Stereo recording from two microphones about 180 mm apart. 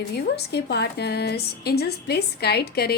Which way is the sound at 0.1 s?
65° left (ahead or behind).